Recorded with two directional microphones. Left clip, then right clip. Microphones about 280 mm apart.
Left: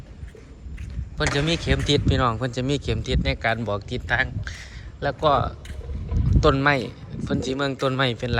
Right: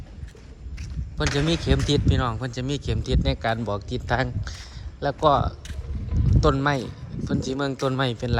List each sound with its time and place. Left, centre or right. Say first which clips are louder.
1.4 s speech: even; centre